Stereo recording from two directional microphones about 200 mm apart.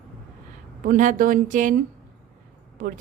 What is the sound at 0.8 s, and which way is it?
Speech, 40° right (ahead or behind).